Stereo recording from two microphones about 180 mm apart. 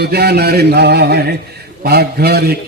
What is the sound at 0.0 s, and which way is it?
Speech, 65° right (ahead or behind).